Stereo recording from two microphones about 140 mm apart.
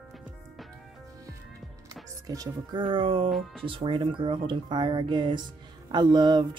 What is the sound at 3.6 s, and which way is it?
Speech, 40° right (ahead or behind).